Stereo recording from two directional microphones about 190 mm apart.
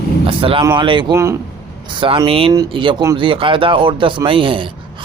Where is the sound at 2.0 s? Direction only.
25° right (ahead or behind).